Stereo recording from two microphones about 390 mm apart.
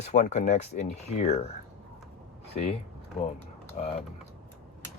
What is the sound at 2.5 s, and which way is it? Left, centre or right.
Speech, centre.